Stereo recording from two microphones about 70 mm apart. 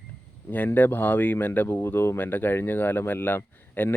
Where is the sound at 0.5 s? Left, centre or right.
Left.